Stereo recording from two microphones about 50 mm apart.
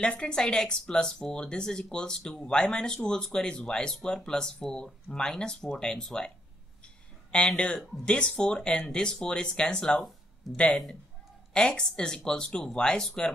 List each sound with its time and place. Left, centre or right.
0.2 s speech: centre
7.3 s speech: centre